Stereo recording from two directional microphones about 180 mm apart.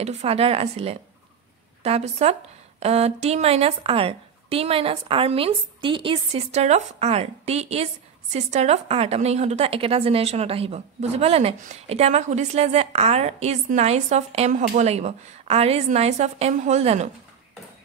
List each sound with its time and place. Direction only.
0.0 s a woman's voice: 35° right (ahead or behind)